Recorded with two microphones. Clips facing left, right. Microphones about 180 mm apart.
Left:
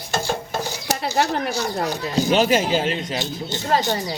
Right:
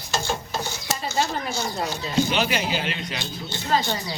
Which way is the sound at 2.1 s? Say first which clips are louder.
Left 5 dB; 40° left (ahead or behind).